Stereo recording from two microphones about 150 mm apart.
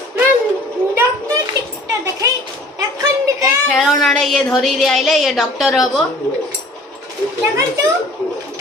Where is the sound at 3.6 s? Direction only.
Centre (ahead or behind).